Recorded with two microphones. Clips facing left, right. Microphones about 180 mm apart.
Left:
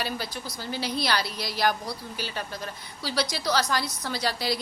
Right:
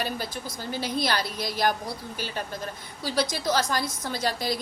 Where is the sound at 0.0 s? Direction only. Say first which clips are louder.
Right 1 dB; 50° right (ahead or behind).